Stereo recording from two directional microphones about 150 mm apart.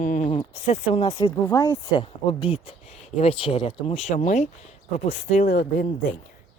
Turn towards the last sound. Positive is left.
turn(degrees=75)  # may be behind; listen again after turning